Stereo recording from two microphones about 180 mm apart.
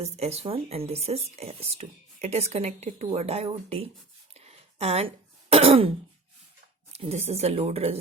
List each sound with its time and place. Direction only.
0.0 s speech: 35° right (ahead or behind)
4.4 s throat clearing: 35° right (ahead or behind)
6.9 s speech: 35° right (ahead or behind)